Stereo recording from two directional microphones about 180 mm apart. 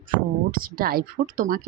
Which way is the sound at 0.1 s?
50° right (ahead or behind).